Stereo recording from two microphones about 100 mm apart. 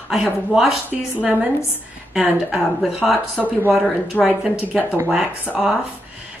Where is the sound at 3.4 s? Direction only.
20° right (ahead or behind).